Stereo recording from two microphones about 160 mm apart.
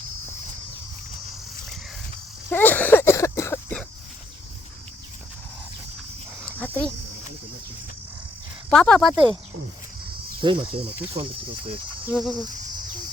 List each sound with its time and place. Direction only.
2.5 s a sound: 10° left (ahead or behind)
6.4 s dog: 10° left (ahead or behind)
8.7 s speech: 5° left (ahead or behind)
10.4 s speech: 35° right (ahead or behind)
12.0 s speech: 5° right (ahead or behind)